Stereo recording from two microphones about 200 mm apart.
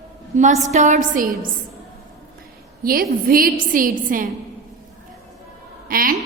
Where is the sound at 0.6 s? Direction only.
35° right (ahead or behind).